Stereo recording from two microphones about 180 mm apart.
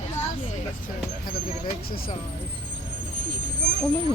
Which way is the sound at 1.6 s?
55° left (ahead or behind).